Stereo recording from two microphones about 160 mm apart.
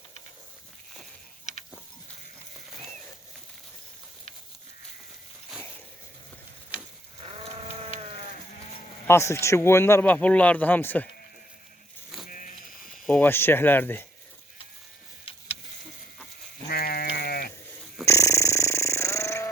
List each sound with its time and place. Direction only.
9.0 s speech: 15° left (ahead or behind)
12.1 s a sound: centre (ahead or behind)
13.1 s speech: 10° left (ahead or behind)
15.2 s vehicle: 35° left (ahead or behind)
16.6 s sheep: 70° left (ahead or behind)
18.0 s snoring: 20° left (ahead or behind)